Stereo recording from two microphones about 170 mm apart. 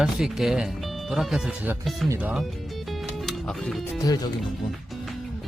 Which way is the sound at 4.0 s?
20° left (ahead or behind).